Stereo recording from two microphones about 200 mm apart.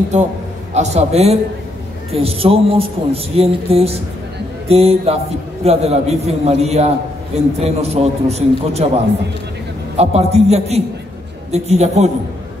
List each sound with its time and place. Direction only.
0.1 s a man's voice: 35° right (ahead or behind)
9.9 s a man's voice: 30° right (ahead or behind)